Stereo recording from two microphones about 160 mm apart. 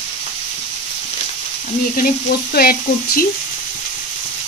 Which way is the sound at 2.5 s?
70° left (ahead or behind).